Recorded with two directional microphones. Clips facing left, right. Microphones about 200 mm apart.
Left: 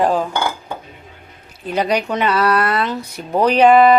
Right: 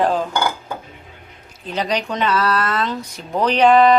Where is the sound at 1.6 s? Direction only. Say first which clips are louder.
Left 4 dB; 10° left (ahead or behind).